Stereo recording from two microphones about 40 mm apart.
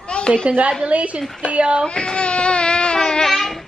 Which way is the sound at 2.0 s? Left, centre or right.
Left.